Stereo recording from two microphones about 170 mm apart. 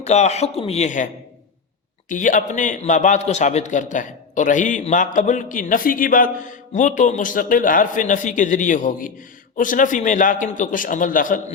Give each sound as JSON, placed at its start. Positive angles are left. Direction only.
{"t": 0.0, "sound": "a man's voice", "side_deg": 40}